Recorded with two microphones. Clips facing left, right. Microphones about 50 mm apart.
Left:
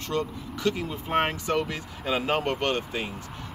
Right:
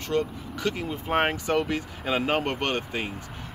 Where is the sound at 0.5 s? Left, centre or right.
Right.